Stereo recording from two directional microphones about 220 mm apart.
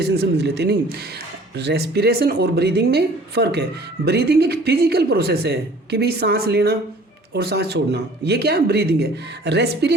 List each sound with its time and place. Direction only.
0.0 s speech: 45° right (ahead or behind)